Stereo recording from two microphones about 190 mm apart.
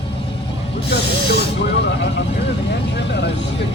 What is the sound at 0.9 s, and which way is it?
Snake, 60° left (ahead or behind).